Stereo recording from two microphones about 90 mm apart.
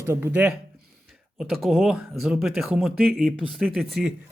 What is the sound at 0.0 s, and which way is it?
Speech, 25° right (ahead or behind).